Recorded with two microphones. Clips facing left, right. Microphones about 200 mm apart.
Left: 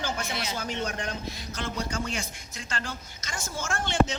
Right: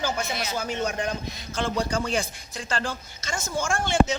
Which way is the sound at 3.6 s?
10° right (ahead or behind).